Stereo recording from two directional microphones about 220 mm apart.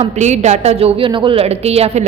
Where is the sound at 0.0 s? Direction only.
30° right (ahead or behind).